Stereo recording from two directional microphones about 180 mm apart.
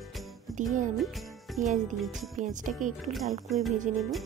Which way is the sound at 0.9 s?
Centre (ahead or behind).